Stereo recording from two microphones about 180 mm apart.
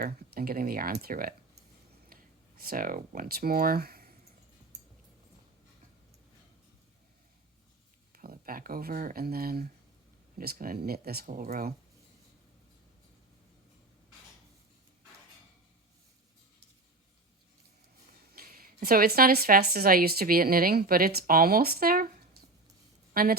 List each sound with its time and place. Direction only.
0.0 s speech: 55° right (ahead or behind)
2.1 s a sound: 55° right (ahead or behind)
2.6 s a woman's voice: 55° right (ahead or behind)
8.1 s a woman's voice: 55° right (ahead or behind)
18.3 s a woman's voice: 55° right (ahead or behind)
23.1 s a woman's voice: 55° right (ahead or behind)